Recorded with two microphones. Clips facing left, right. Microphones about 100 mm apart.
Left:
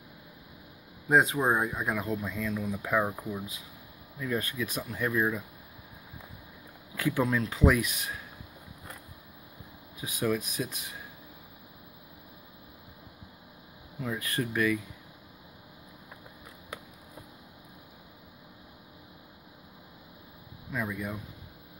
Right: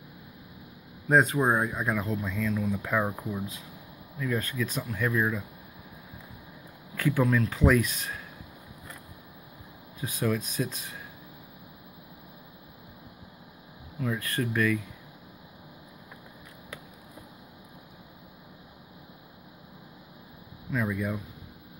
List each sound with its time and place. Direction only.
1.0 s speech: 5° left (ahead or behind)
1.9 s speech: 10° left (ahead or behind)
4.2 s speech: 15° left (ahead or behind)
7.0 s speech: 15° left (ahead or behind)
9.9 s speech: 10° left (ahead or behind)
13.9 s speech: 15° left (ahead or behind)
20.7 s speech: 5° left (ahead or behind)